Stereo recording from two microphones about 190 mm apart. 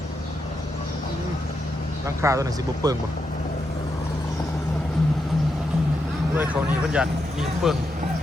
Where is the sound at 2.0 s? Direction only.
15° right (ahead or behind).